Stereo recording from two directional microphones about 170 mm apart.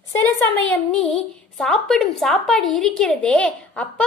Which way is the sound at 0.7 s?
Centre (ahead or behind).